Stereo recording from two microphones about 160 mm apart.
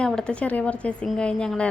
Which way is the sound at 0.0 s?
5° left (ahead or behind).